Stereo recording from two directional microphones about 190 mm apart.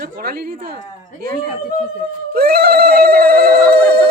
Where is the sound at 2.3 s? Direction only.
55° right (ahead or behind).